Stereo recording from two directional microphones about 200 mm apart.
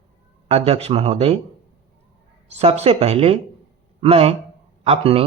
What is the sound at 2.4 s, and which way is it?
Speech, 30° right (ahead or behind).